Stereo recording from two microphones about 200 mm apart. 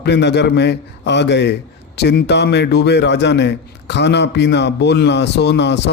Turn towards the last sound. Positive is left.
turn(degrees=60)  # may be behind; listen again after turning